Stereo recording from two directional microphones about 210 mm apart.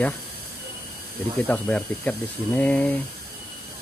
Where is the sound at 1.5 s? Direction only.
5° left (ahead or behind).